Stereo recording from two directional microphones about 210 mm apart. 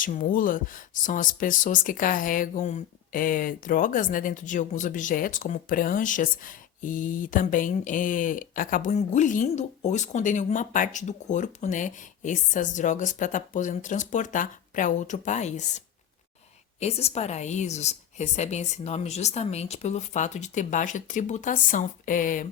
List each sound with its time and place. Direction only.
0.0 s speech: 40° left (ahead or behind)
16.8 s speech: 30° left (ahead or behind)